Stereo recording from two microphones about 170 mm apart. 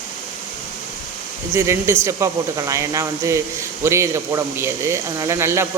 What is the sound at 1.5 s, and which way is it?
Speech, 15° right (ahead or behind).